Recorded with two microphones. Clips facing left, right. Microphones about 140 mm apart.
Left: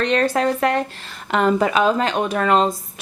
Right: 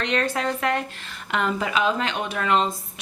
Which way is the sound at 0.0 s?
40° left (ahead or behind).